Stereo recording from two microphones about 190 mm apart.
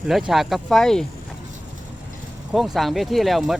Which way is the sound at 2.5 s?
Centre (ahead or behind).